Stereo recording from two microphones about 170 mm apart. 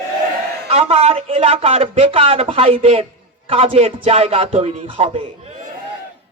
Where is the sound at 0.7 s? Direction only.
35° right (ahead or behind).